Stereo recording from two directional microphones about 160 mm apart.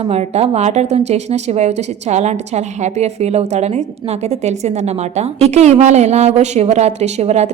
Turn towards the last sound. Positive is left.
turn(degrees=-45)  # may be behind; listen again after turning